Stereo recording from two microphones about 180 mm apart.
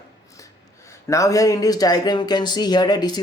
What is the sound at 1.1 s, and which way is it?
Speech, 15° left (ahead or behind).